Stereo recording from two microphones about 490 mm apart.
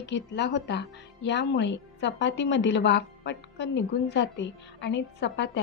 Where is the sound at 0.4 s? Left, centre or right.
Left.